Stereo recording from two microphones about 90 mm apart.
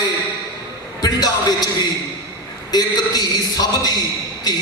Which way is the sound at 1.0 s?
50° left (ahead or behind).